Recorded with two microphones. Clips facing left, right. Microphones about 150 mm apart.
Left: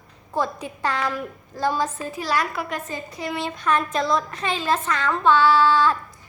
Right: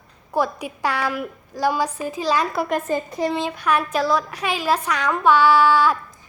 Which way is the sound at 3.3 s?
15° right (ahead or behind).